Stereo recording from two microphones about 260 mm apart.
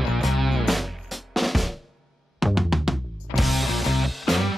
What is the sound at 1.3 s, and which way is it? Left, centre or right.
Drum, centre.